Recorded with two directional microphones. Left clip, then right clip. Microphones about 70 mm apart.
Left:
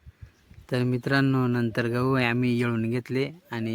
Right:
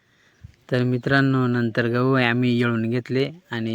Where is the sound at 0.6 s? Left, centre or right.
Right.